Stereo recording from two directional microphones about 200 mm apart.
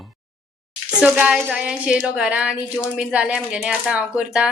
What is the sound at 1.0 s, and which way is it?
A woman's voice, 5° right (ahead or behind).